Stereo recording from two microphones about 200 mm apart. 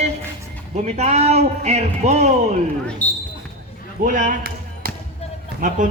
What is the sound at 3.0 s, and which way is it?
Basketball bounce, 5° left (ahead or behind).